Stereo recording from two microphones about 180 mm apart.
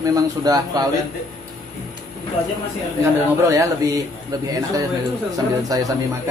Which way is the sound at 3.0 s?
15° right (ahead or behind).